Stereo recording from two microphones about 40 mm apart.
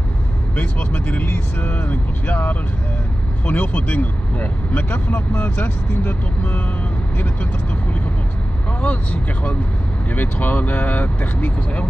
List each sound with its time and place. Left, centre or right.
0.6 s speech: left
8.8 s speech: left